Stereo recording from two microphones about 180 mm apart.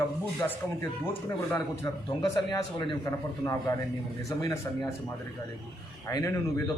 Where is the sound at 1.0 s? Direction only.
10° left (ahead or behind).